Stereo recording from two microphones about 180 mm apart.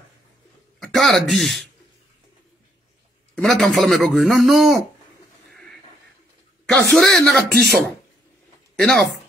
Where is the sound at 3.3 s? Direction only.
5° left (ahead or behind).